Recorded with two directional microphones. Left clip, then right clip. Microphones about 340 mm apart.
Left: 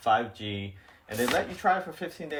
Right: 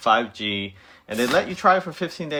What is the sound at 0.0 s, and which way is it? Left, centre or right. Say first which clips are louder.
Speech: right 6 dB; centre.